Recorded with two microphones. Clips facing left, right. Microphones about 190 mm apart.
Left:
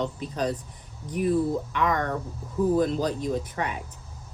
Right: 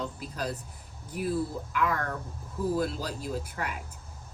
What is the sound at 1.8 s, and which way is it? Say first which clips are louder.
Speech: left 4 dB; 80° left.